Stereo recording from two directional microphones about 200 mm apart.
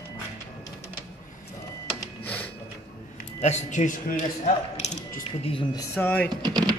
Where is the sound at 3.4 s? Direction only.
35° left (ahead or behind).